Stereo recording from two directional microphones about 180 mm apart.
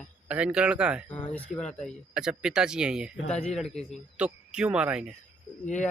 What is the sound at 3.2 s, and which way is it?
Speech, 40° left (ahead or behind).